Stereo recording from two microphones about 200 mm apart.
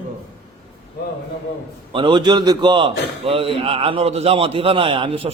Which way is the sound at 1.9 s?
25° right (ahead or behind).